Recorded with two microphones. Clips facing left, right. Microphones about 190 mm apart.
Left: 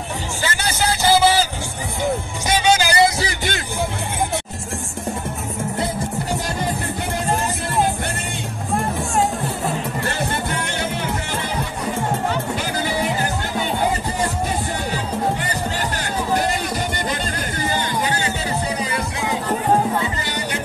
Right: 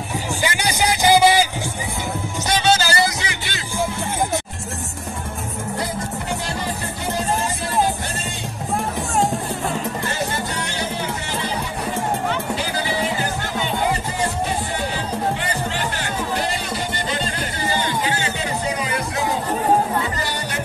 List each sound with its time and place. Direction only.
0.4 s vehicle: 15° right (ahead or behind)
2.4 s music: 10° left (ahead or behind)
17.7 s music: 40° left (ahead or behind)